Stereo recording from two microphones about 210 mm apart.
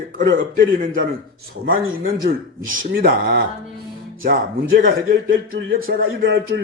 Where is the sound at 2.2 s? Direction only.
40° right (ahead or behind).